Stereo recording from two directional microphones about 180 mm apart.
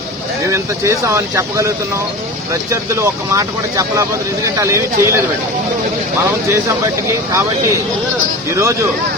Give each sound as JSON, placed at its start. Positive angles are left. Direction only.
{"t": 0.5, "sound": "speech", "side_deg": -15}
{"t": 6.5, "sound": "speech", "side_deg": -15}